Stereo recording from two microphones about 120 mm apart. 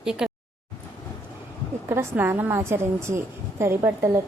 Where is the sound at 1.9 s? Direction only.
20° right (ahead or behind).